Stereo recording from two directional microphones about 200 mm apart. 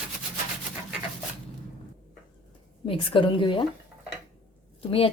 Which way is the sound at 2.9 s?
25° left (ahead or behind).